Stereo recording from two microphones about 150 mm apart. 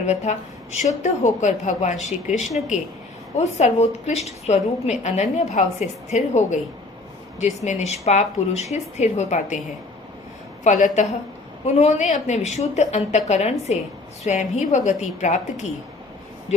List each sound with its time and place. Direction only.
0.0 s a woman's voice: 50° left (ahead or behind)
10.6 s a woman's voice: 55° left (ahead or behind)